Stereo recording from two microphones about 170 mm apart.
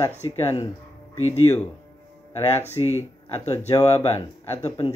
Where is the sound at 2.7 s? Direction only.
40° left (ahead or behind).